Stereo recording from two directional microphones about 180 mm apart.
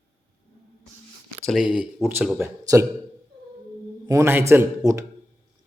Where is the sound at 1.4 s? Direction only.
5° right (ahead or behind).